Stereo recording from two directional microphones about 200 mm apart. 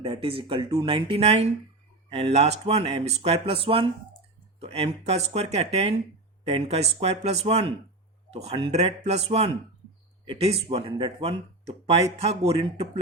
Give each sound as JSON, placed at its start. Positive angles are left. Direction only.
{"t": 0.0, "sound": "speech", "side_deg": -25}